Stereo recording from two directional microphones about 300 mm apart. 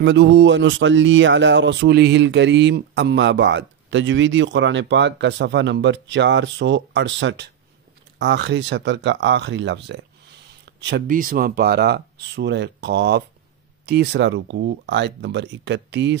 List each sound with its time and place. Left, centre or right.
0.0 s speech: right